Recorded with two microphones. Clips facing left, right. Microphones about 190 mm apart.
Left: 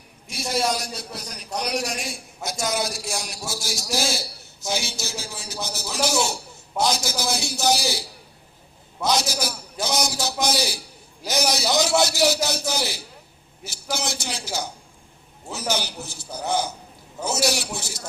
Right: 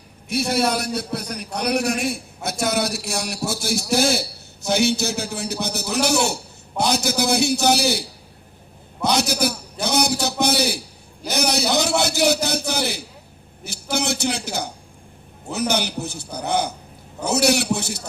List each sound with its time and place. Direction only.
0.3 s a man's voice: 60° right (ahead or behind)
9.0 s a man's voice: 60° right (ahead or behind)